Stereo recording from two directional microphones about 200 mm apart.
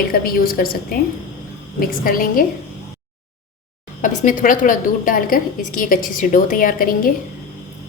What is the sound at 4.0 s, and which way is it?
A woman's voice, 40° left (ahead or behind).